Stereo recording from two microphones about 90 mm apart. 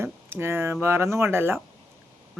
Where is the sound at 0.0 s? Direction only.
25° right (ahead or behind).